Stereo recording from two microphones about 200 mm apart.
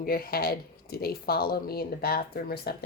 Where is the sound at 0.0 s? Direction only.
50° left (ahead or behind).